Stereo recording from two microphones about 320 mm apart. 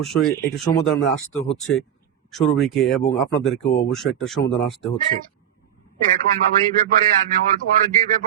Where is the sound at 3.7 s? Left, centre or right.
Left.